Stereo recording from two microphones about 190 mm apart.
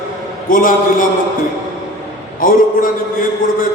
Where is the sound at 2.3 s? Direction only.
45° left (ahead or behind).